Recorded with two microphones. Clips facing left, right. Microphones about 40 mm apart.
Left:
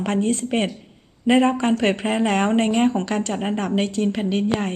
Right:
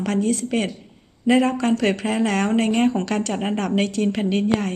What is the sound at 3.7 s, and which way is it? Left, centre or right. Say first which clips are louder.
Speech: right 1 dB; centre.